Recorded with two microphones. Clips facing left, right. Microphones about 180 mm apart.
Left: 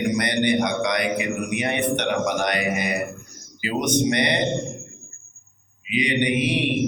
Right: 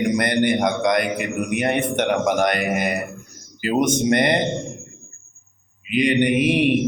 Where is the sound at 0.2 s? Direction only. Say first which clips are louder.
Right 2 dB; 50° right (ahead or behind).